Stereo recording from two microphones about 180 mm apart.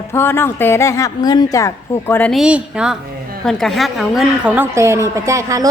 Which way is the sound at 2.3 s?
5° right (ahead or behind).